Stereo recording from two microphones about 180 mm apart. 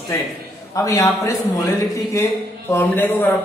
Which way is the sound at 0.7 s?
20° left (ahead or behind).